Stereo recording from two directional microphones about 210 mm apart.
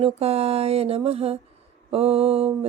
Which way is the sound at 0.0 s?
30° right (ahead or behind).